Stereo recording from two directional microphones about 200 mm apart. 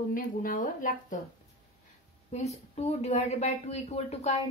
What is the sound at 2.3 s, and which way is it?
A woman's voice, 35° left (ahead or behind).